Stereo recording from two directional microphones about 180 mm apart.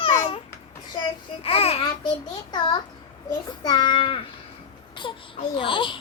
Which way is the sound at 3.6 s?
25° left (ahead or behind).